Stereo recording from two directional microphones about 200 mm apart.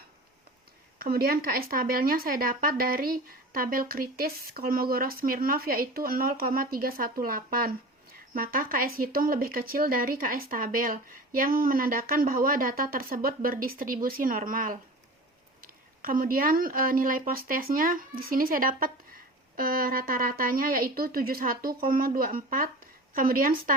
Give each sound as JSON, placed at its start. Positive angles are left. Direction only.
{"t": 0.9, "sound": "speech", "side_deg": -50}